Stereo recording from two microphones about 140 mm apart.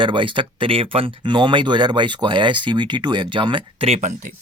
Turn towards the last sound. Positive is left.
turn(degrees=-60)  # may be behind; listen again after turning